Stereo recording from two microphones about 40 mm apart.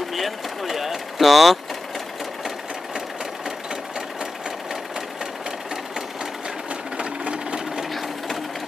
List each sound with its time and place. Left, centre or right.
0.1 s vehicle: centre
7.0 s sewing machine: right